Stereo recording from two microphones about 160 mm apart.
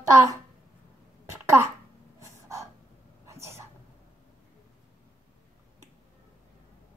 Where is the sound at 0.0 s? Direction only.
20° right (ahead or behind).